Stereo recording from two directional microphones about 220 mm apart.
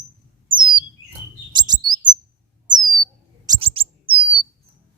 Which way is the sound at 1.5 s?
20° right (ahead or behind).